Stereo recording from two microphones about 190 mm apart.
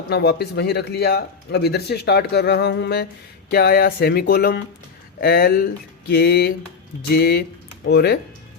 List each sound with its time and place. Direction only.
0.1 s speech: 60° left (ahead or behind)